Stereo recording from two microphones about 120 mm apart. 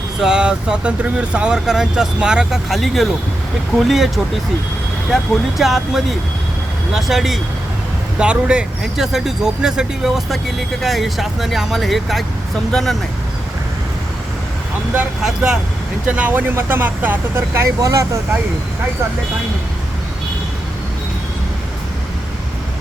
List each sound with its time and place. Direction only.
0.2 s speech: 5° right (ahead or behind)
14.9 s speech: 10° right (ahead or behind); by 18.2 s 25° right (ahead or behind)